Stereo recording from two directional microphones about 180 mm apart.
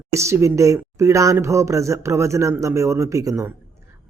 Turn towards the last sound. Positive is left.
turn(degrees=-15)  # may be behind; listen again after turning